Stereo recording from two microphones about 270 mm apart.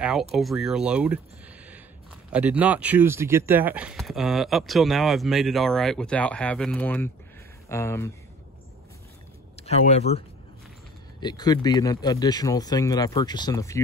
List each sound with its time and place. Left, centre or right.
0.0 s speech: centre
2.3 s speech: centre
9.6 s speech: left